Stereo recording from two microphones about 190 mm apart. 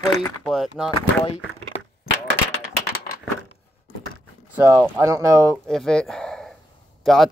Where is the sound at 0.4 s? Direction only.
Centre (ahead or behind).